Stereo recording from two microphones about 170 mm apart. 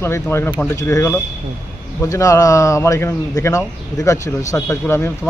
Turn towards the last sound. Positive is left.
turn(degrees=15)  # may be behind; listen again after turning